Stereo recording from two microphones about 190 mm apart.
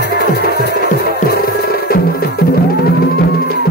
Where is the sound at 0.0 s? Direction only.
55° left (ahead or behind).